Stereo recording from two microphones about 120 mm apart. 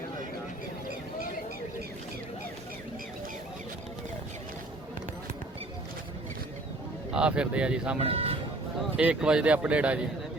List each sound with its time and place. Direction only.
7.1 s speech: 10° right (ahead or behind)
8.0 s speech: 55° right (ahead or behind)
9.0 s speech: 10° right (ahead or behind)